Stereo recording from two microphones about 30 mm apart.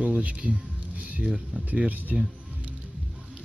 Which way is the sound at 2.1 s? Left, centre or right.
Right.